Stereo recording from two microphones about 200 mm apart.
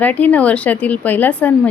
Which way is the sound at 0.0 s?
10° left (ahead or behind).